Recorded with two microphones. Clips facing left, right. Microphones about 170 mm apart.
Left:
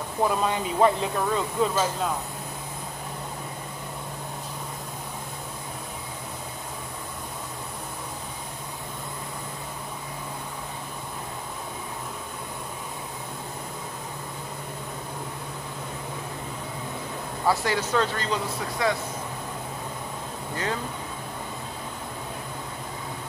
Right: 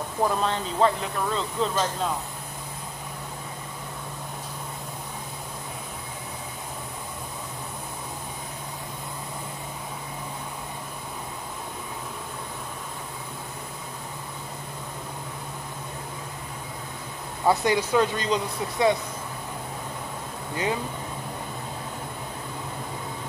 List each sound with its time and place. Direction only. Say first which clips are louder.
0.2 s speech: left 1 dB; 5° left (ahead or behind)
17.5 s speech: right 3 dB; 15° right (ahead or behind)
20.5 s speech: right 3 dB; 15° right (ahead or behind)